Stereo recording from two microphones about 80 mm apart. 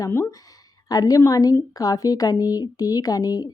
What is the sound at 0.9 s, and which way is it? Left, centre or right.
A woman's voice, left.